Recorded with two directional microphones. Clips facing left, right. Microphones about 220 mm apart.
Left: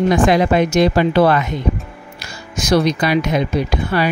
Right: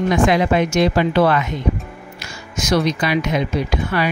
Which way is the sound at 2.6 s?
35° left (ahead or behind).